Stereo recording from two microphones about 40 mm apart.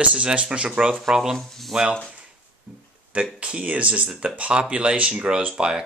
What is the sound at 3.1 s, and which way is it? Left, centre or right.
Speech, right.